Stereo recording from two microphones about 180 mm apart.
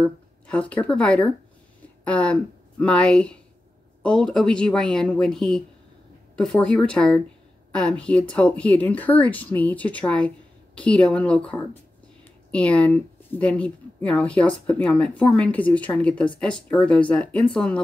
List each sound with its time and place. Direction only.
0.0 s speech: 5° left (ahead or behind)